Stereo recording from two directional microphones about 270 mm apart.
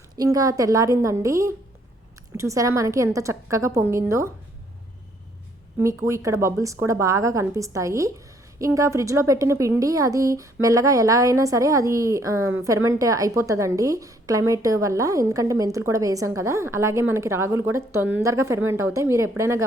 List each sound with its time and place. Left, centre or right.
0.2 s a woman's voice: centre
5.8 s a woman's voice: centre